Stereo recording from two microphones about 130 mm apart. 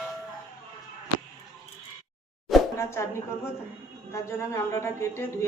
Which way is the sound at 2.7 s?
20° left (ahead or behind).